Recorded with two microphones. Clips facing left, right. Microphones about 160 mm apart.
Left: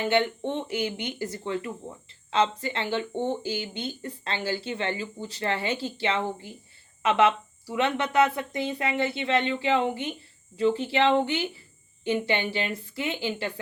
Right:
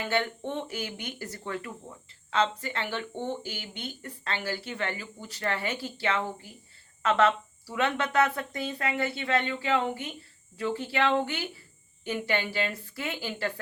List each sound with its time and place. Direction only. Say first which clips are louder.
0.0 s speech: left 5 dB; 25° left (ahead or behind)
7.0 s speech: left 2 dB; 10° left (ahead or behind)